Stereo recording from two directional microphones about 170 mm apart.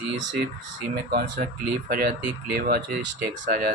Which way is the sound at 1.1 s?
65° right (ahead or behind).